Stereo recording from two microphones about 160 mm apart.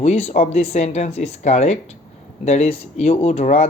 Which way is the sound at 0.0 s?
40° left (ahead or behind).